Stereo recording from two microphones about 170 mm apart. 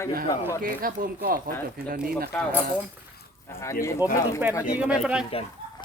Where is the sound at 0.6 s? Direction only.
55° right (ahead or behind).